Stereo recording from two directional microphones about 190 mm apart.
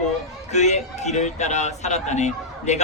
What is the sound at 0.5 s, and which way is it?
Speech, 35° left (ahead or behind).